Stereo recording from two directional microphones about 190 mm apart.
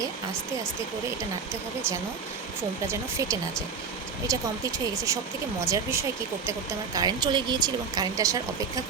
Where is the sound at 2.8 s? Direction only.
15° right (ahead or behind).